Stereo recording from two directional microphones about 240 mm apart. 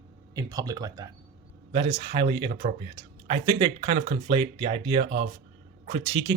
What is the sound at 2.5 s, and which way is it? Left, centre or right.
Speech, right.